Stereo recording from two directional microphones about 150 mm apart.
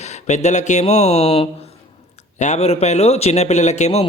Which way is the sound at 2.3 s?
50° left (ahead or behind).